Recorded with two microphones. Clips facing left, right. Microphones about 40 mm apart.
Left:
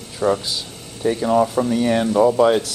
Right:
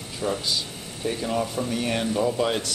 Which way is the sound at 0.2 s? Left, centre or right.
Left.